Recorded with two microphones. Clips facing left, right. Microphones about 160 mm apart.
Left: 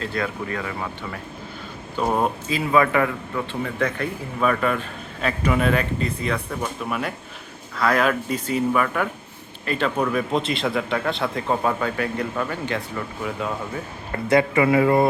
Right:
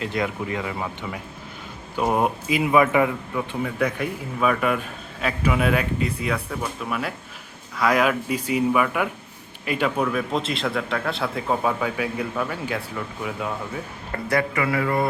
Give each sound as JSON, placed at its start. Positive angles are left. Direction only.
{"t": 0.0, "sound": "a man's voice", "side_deg": -20}
{"t": 7.8, "sound": "a man's voice", "side_deg": -10}
{"t": 14.3, "sound": "speech", "side_deg": 25}